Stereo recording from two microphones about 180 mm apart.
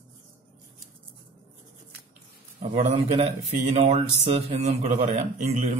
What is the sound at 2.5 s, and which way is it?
A man's voice, 35° right (ahead or behind).